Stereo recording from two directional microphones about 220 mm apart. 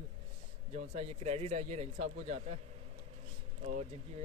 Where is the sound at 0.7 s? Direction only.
30° right (ahead or behind).